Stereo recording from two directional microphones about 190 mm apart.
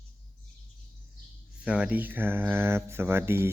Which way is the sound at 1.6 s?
5° right (ahead or behind).